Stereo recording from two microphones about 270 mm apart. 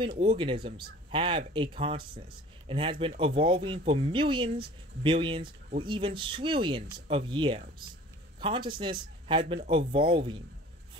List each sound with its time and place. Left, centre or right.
0.2 s a man's voice: centre